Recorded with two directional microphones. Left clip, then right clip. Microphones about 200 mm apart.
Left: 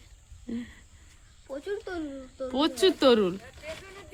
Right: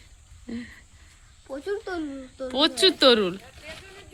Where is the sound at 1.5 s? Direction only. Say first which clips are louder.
Right 4 dB; 45° right (ahead or behind).